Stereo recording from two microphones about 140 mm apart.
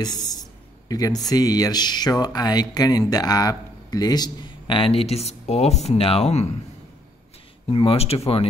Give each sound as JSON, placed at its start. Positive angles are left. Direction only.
{"t": 0.0, "sound": "speech", "side_deg": 30}
{"t": 7.7, "sound": "speech", "side_deg": 45}